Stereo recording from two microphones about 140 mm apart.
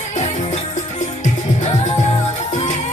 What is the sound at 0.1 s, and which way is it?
Music, 55° left (ahead or behind).